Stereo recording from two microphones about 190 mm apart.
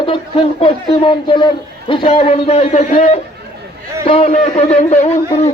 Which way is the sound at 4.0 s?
30° left (ahead or behind).